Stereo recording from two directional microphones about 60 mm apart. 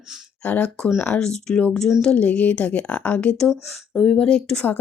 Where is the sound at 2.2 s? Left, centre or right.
Left.